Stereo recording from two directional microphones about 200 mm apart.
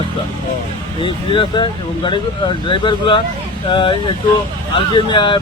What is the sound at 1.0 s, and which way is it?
Speech, 25° left (ahead or behind).